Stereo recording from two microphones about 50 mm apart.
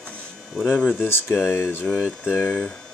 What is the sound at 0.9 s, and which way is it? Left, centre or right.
Speech, left.